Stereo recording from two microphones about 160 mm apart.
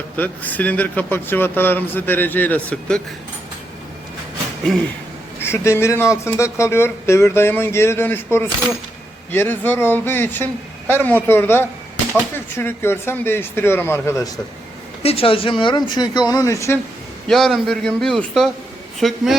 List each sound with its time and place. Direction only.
0.2 s speech: 10° left (ahead or behind)
5.4 s speech: 15° left (ahead or behind)
15.0 s speech: 35° left (ahead or behind); by 16.7 s 20° left (ahead or behind)
17.2 s a man's voice: centre (ahead or behind)